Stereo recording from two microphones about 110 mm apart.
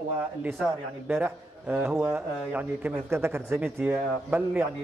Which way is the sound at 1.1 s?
15° right (ahead or behind).